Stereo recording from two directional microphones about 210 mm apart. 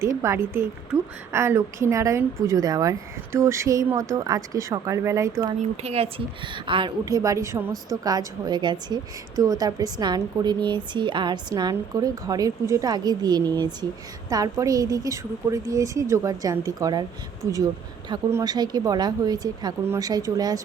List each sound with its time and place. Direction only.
0.0 s a woman's voice: 15° right (ahead or behind)
5.7 s a woman's voice: 30° right (ahead or behind)